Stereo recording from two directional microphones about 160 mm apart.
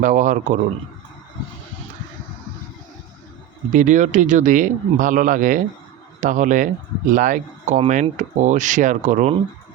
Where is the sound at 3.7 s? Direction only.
55° right (ahead or behind).